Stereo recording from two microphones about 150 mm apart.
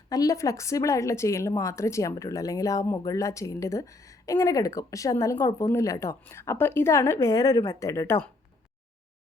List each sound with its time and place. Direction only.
0.1 s speech: 25° left (ahead or behind)